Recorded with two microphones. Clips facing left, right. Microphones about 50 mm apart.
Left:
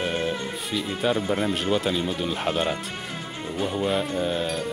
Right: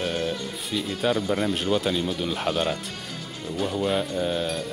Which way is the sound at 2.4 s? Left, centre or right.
Left.